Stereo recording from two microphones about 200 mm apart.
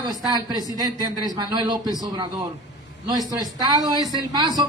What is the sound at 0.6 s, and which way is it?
A woman's voice, 20° right (ahead or behind).